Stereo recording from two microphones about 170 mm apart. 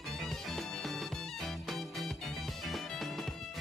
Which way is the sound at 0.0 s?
Centre (ahead or behind).